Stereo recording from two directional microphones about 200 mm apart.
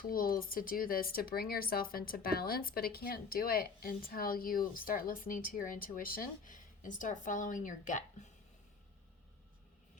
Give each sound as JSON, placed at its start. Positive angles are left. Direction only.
{"t": 0.0, "sound": "speech", "side_deg": 45}